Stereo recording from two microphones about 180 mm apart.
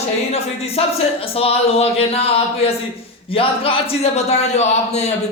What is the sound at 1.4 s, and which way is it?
A man's voice, 35° left (ahead or behind).